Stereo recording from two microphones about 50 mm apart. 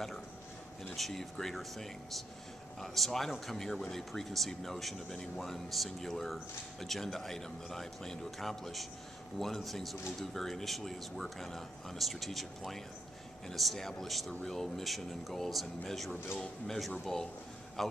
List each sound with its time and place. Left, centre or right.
0.9 s speech: centre
5.1 s speech: centre
5.4 s speech: centre